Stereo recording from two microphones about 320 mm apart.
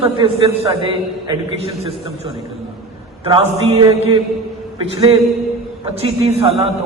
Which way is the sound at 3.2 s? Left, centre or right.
Centre.